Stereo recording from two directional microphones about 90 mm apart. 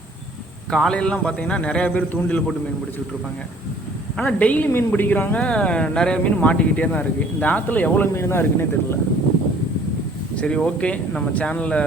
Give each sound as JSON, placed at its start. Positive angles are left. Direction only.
{"t": 0.7, "sound": "speech", "side_deg": 5}
{"t": 4.2, "sound": "speech", "side_deg": 15}
{"t": 10.3, "sound": "speech", "side_deg": 10}